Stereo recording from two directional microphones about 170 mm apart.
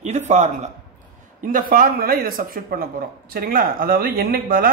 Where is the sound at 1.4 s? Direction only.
55° right (ahead or behind).